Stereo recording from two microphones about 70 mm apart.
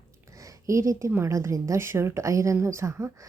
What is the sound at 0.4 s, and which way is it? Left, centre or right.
A woman's voice, right.